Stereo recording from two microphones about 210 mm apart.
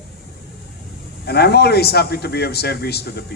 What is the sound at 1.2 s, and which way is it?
Speech, 50° left (ahead or behind).